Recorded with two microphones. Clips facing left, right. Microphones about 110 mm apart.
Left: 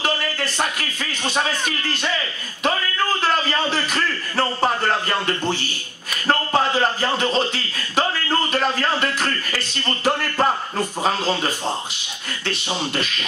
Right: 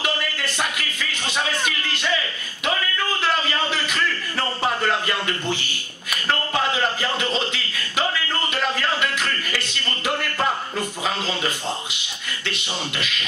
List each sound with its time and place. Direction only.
0.7 s speech: 40° left (ahead or behind)
3.7 s a sound: 35° left (ahead or behind)
10.0 s speech: 35° left (ahead or behind)
12.4 s speech: 40° left (ahead or behind)